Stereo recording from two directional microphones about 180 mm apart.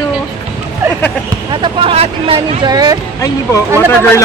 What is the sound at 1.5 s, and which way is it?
Speech, 30° right (ahead or behind).